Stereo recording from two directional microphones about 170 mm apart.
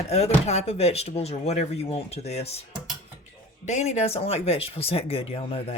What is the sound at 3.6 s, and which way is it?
Speech, 40° left (ahead or behind).